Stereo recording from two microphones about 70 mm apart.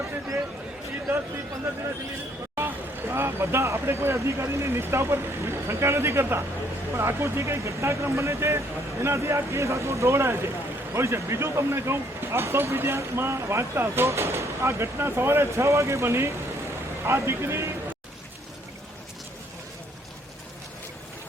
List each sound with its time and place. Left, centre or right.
2.6 s speech: right